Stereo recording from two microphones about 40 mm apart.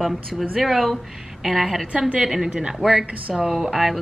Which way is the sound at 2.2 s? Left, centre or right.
Centre.